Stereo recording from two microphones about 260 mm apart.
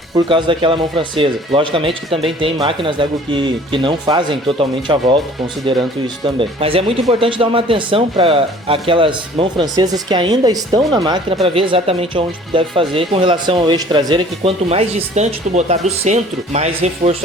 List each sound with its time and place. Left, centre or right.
0.3 s speech: centre